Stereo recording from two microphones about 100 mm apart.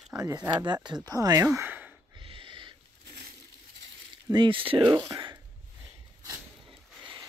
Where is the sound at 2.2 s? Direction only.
60° right (ahead or behind).